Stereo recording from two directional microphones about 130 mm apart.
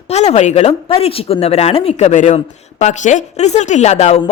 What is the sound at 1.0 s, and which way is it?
A woman's voice, 50° left (ahead or behind).